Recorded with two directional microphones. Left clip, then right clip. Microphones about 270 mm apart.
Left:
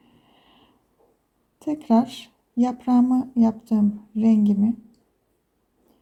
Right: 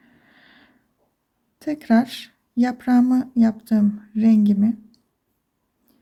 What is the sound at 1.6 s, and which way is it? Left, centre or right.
Speech, centre.